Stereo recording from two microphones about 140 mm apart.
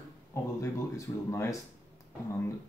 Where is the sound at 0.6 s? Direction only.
20° left (ahead or behind).